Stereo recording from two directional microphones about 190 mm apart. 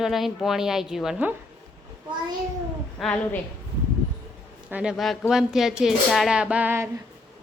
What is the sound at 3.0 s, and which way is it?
Speech, 5° left (ahead or behind).